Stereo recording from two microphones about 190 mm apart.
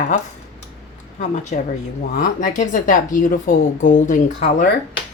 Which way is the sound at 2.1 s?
45° left (ahead or behind).